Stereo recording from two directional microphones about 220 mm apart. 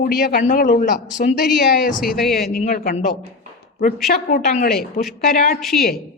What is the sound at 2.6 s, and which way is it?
Speech, 35° left (ahead or behind).